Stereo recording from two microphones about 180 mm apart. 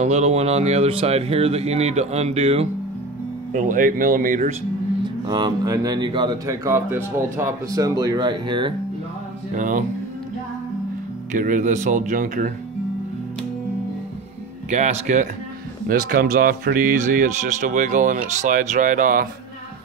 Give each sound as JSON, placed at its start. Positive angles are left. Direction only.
{"t": 0.0, "sound": "speech", "side_deg": -35}
{"t": 3.5, "sound": "speech", "side_deg": -45}
{"t": 5.2, "sound": "speech", "side_deg": -25}
{"t": 9.5, "sound": "speech", "side_deg": -45}
{"t": 11.3, "sound": "speech", "side_deg": -45}
{"t": 14.7, "sound": "speech", "side_deg": -40}
{"t": 15.9, "sound": "speech", "side_deg": -55}